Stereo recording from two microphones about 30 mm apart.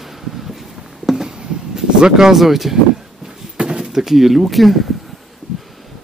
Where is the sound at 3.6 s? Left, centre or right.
Right.